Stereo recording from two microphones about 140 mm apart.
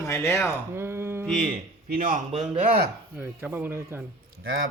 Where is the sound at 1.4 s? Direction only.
40° right (ahead or behind).